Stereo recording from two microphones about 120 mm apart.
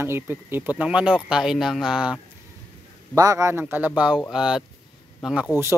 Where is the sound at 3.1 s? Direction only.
30° right (ahead or behind); by 4.6 s 5° right (ahead or behind).